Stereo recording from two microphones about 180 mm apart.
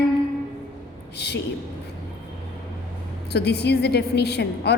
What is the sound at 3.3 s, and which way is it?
A woman's voice, 65° left (ahead or behind).